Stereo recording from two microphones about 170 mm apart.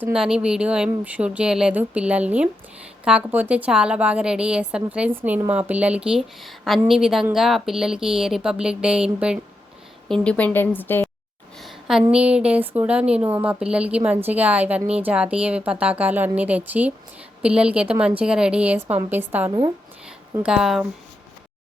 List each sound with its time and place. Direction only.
0.0 s a woman's voice: 5° right (ahead or behind)
10.1 s a woman's voice: 5° left (ahead or behind)
11.6 s a woman's voice: 5° right (ahead or behind)
19.5 s speech: 25° right (ahead or behind)
20.3 s speech: 5° right (ahead or behind)